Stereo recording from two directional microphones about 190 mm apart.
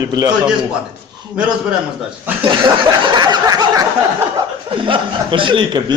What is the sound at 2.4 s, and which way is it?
Speech, 25° right (ahead or behind).